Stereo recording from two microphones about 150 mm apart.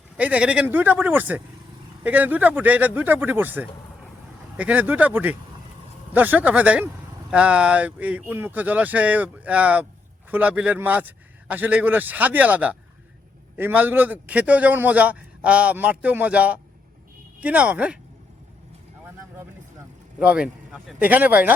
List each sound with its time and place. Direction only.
0.2 s a man's voice: 10° right (ahead or behind)
20.1 s a man's voice: 10° right (ahead or behind)